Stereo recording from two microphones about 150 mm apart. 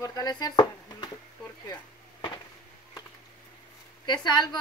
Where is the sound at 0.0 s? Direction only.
25° left (ahead or behind).